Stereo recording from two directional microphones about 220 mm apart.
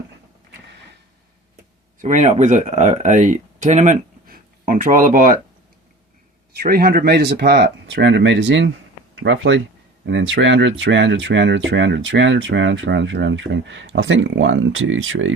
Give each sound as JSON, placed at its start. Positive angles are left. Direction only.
{"t": 2.0, "sound": "speech", "side_deg": -35}
{"t": 6.6, "sound": "speech", "side_deg": -45}